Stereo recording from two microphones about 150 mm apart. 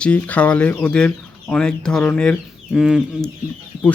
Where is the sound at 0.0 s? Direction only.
10° left (ahead or behind).